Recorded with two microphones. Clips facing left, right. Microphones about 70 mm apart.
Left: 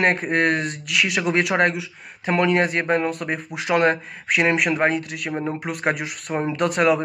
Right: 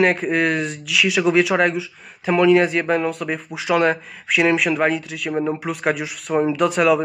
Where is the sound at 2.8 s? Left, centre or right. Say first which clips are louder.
Right 1 dB; centre.